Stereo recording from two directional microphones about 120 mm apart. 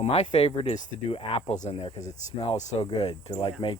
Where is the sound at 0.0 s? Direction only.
70° left (ahead or behind).